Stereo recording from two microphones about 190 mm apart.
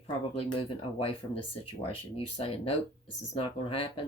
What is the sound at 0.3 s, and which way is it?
Speech, 30° left (ahead or behind).